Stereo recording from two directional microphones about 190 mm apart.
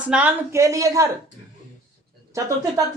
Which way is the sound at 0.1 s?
10° right (ahead or behind).